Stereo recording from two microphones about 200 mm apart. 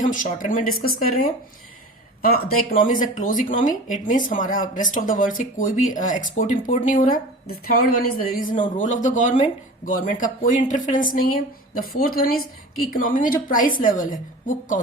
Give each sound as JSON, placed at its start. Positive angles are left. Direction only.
{"t": 0.0, "sound": "a woman's voice", "side_deg": 40}
{"t": 7.9, "sound": "speech", "side_deg": 90}
{"t": 8.2, "sound": "a woman's voice", "side_deg": 45}